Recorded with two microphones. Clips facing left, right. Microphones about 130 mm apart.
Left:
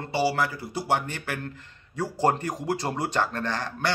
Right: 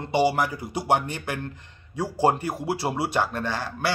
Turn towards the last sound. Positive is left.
turn(degrees=-10)  # may be behind; listen again after turning